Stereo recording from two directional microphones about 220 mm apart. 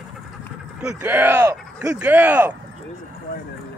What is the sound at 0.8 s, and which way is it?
Speech, 5° right (ahead or behind).